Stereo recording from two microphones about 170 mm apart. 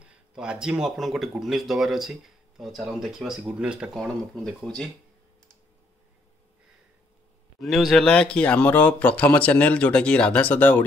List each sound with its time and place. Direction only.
0.0 s speech: 5° right (ahead or behind)
7.6 s speech: centre (ahead or behind)